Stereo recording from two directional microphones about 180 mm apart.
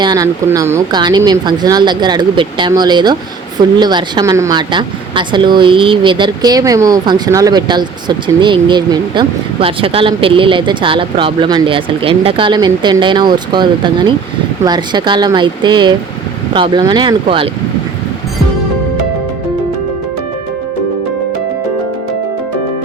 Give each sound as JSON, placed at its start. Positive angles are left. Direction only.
{"t": 0.0, "sound": "speech", "side_deg": -20}